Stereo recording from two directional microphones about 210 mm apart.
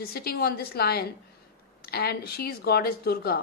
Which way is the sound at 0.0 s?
45° left (ahead or behind).